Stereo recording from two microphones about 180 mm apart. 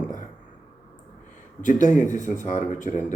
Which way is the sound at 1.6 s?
45° left (ahead or behind).